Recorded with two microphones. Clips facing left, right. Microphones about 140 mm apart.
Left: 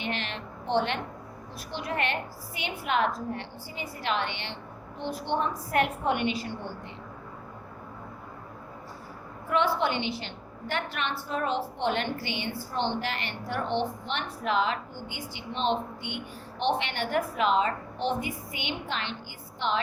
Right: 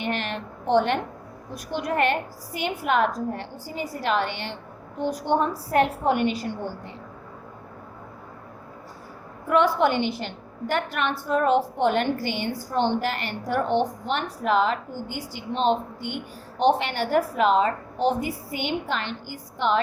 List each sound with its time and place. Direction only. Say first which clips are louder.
0.0 s a woman's voice: right 5 dB; 45° right (ahead or behind)
9.5 s a woman's voice: right 6 dB; 45° right (ahead or behind)